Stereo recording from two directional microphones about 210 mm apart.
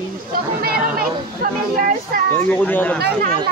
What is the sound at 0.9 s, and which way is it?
Speech, 45° right (ahead or behind).